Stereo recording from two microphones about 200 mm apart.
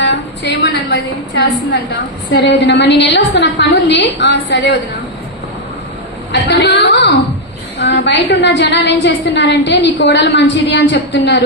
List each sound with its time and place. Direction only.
0.0 s a sound: 60° left (ahead or behind)
1.7 s a woman's voice: 60° left (ahead or behind)
6.3 s a woman's voice: 60° left (ahead or behind)